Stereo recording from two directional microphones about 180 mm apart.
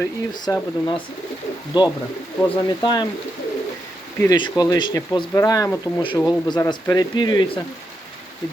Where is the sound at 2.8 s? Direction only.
25° left (ahead or behind).